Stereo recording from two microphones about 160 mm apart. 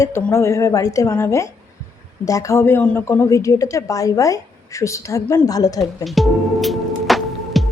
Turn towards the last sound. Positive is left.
turn(degrees=0)  # may be behind; listen again after turning